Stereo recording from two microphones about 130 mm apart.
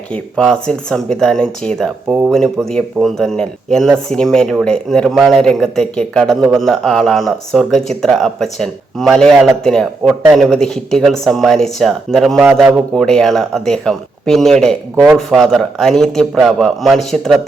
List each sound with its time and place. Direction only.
0.1 s speech: 5° left (ahead or behind)
14.9 s speech: 15° right (ahead or behind)
15.3 s speech: centre (ahead or behind)